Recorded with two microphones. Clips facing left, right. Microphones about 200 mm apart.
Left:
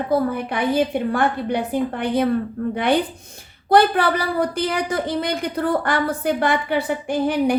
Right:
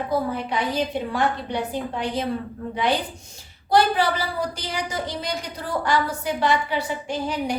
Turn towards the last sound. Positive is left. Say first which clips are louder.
# left 7 dB
turn(degrees=55)  # may be behind; listen again after turning